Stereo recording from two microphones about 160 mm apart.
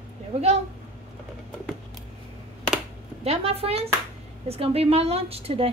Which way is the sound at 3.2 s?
40° right (ahead or behind).